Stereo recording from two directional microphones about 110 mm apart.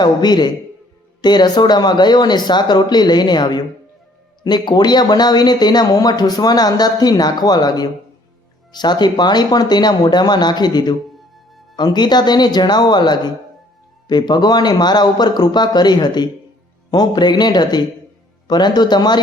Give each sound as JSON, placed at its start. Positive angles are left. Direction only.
{"t": 0.0, "sound": "speech", "side_deg": 40}